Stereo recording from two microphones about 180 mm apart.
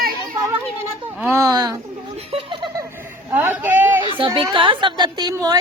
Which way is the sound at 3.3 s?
10° right (ahead or behind).